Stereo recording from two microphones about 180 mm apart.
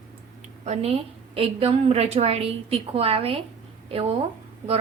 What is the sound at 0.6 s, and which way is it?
A woman's voice, 35° right (ahead or behind).